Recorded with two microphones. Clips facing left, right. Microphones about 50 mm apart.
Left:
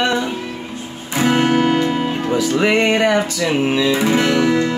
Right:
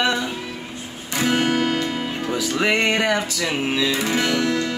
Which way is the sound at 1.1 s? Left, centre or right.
Centre.